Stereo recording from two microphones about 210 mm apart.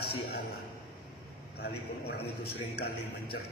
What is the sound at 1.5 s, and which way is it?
A man's voice, 50° left (ahead or behind).